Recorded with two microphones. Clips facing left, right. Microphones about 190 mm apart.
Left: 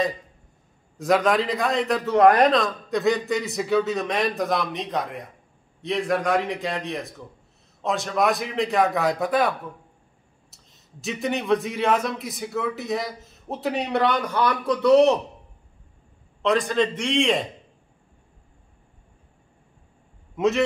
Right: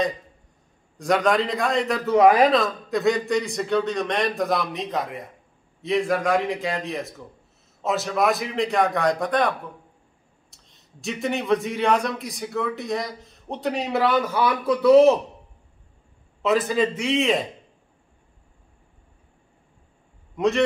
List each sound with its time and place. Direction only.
0.9 s a man's voice: centre (ahead or behind)
16.4 s a man's voice: 5° right (ahead or behind)
20.3 s a man's voice: centre (ahead or behind)